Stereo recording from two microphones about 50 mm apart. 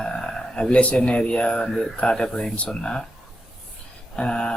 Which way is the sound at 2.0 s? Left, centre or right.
Centre.